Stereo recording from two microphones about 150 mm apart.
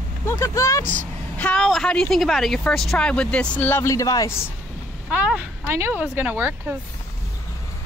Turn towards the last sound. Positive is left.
turn(degrees=-10)  # may be behind; listen again after turning